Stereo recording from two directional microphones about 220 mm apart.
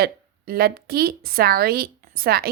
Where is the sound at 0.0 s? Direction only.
45° right (ahead or behind).